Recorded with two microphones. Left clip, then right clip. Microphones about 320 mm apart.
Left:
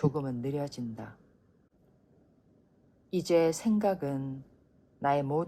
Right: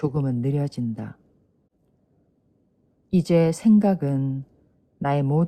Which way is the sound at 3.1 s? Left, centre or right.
Right.